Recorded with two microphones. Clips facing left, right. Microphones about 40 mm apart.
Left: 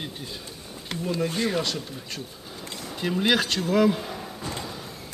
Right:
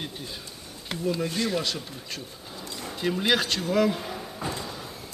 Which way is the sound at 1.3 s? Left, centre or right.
Left.